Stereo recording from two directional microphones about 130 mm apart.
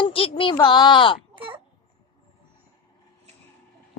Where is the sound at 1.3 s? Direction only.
40° right (ahead or behind).